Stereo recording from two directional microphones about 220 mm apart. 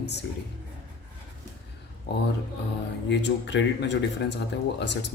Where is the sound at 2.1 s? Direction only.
50° left (ahead or behind).